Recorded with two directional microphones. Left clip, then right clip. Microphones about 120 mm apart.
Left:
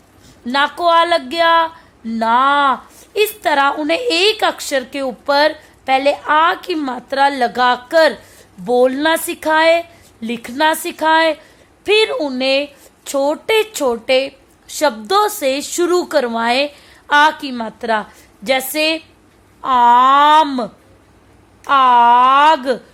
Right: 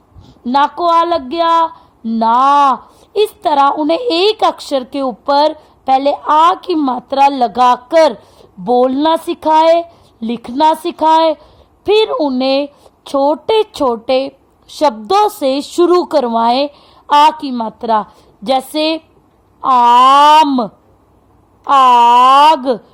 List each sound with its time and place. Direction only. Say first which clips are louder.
0.4 s speech: right 3 dB; 30° right (ahead or behind)